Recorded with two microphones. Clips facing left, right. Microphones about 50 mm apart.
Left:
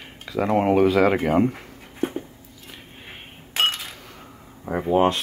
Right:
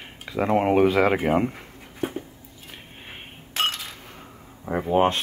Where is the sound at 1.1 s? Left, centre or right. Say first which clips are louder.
Left 2 dB; centre.